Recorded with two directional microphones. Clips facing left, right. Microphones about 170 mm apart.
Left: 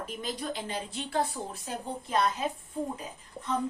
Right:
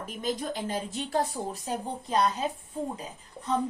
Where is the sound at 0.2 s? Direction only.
45° right (ahead or behind).